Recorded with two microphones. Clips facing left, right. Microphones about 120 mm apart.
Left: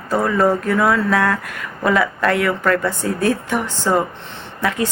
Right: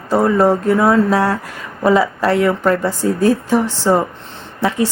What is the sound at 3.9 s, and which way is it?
Speech, 20° right (ahead or behind).